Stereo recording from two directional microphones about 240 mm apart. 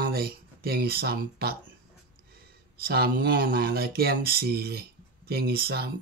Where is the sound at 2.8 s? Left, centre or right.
Right.